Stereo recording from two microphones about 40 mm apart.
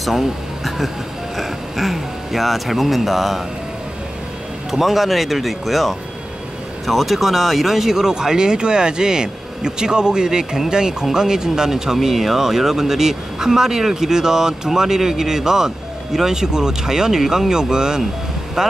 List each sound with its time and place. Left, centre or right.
1.3 s speech: centre
4.6 s speech: centre